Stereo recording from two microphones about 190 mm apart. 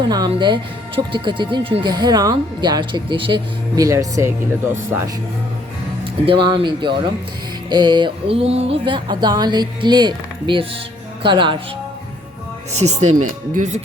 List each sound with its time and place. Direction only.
0.0 s speech: 20° right (ahead or behind)
6.2 s speech: 25° right (ahead or behind)
12.7 s speech: 35° right (ahead or behind)